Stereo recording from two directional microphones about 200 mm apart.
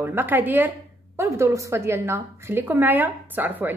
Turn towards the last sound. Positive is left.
turn(degrees=-10)  # may be behind; listen again after turning